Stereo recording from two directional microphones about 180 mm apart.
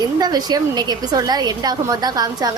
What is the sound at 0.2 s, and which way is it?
Speech, 25° right (ahead or behind).